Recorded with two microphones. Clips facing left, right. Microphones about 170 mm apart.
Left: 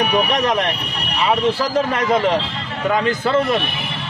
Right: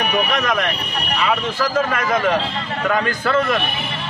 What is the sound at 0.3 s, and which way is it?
A man's voice, 30° left (ahead or behind).